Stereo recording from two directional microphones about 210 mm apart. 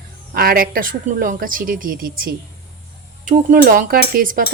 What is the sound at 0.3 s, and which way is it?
Speech, 45° right (ahead or behind).